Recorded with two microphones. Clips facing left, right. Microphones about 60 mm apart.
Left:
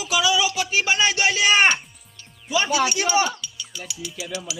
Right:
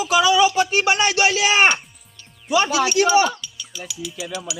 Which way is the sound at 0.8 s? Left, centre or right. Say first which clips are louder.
Even; right.